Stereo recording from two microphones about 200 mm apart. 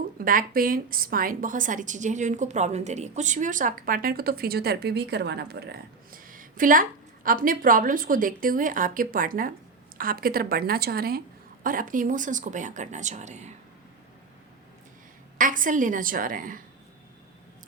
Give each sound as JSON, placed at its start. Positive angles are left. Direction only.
{"t": 0.2, "sound": "a woman's voice", "side_deg": -45}
{"t": 15.4, "sound": "a woman's voice", "side_deg": -40}